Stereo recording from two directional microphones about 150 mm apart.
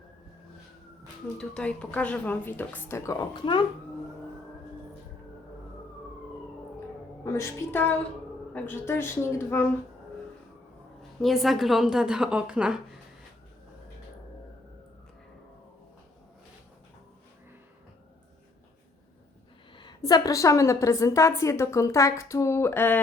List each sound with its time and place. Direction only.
1.4 s a woman's voice: 5° left (ahead or behind); by 3.7 s 30° left (ahead or behind)
7.3 s a woman's voice: 15° left (ahead or behind)
11.2 s a woman's voice: centre (ahead or behind)
19.7 s a woman's voice: 30° left (ahead or behind); by 23.0 s 15° left (ahead or behind)